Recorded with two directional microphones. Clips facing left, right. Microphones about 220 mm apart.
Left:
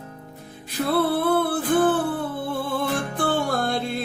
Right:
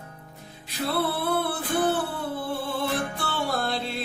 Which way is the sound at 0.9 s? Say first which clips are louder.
Left 6 dB; 50° left (ahead or behind).